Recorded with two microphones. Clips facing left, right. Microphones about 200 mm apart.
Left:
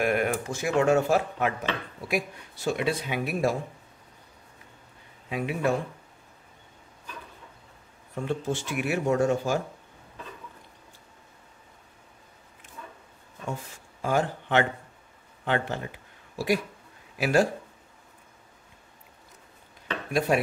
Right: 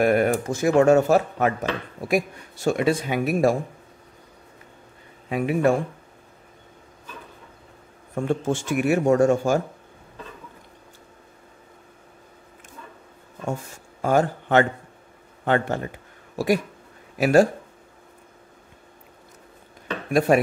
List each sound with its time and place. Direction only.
0.0 s speech: 40° right (ahead or behind)
5.3 s speech: 50° right (ahead or behind)
8.1 s speech: 50° right (ahead or behind)
14.0 s speech: 45° right (ahead or behind)
20.1 s dishes: 50° right (ahead or behind)